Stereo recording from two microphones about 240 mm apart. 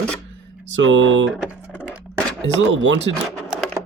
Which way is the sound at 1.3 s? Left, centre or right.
Centre.